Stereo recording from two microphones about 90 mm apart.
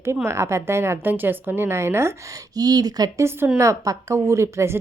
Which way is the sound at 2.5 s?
45° right (ahead or behind).